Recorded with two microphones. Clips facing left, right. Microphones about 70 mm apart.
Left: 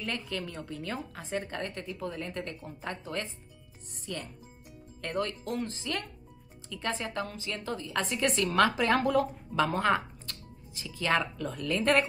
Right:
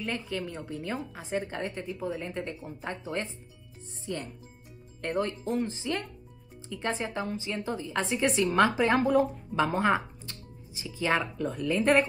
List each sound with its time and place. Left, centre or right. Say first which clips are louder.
0.0 s a woman's voice: right 2 dB; centre
3.9 s music: right 3 dB; right
5.0 s a woman's voice: right 3 dB; right